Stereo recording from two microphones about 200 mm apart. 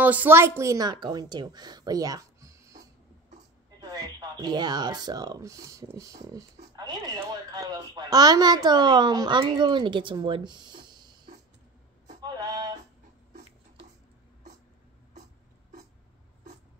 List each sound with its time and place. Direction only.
0.0 s speech: 10° right (ahead or behind)
3.9 s speech: 20° right (ahead or behind)
12.2 s a sound: 20° right (ahead or behind)